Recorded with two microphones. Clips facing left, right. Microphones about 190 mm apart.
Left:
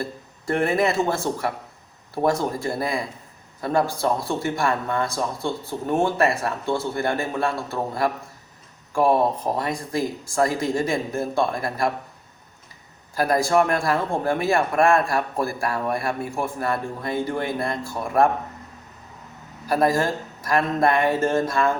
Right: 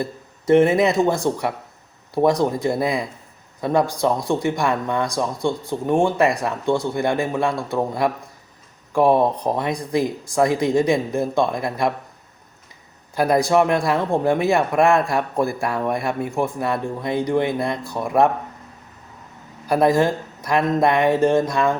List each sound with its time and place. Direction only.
0.6 s speech: 20° right (ahead or behind)
13.1 s speech: 20° right (ahead or behind)
19.6 s speech: 20° right (ahead or behind)